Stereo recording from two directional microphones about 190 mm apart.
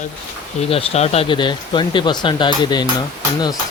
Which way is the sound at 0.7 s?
30° left (ahead or behind).